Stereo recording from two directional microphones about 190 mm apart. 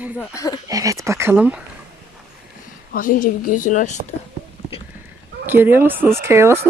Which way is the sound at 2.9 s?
45° left (ahead or behind).